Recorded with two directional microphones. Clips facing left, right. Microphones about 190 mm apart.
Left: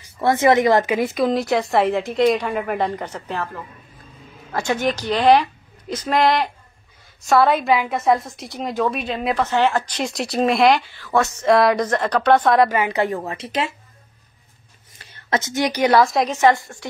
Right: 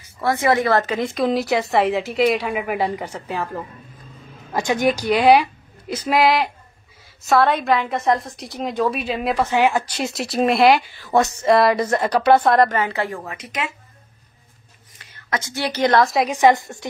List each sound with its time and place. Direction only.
0.2 s a woman's voice: 20° left (ahead or behind); by 3.4 s 10° right (ahead or behind)
4.5 s a woman's voice: 15° right (ahead or behind)
11.0 s speech: 20° right (ahead or behind)
11.4 s a woman's voice: centre (ahead or behind); by 13.7 s 30° left (ahead or behind)
15.0 s a woman's voice: 30° left (ahead or behind); by 16.0 s 10° left (ahead or behind)
16.0 s a woman's voice: centre (ahead or behind)
16.3 s a woman's voice: 15° right (ahead or behind)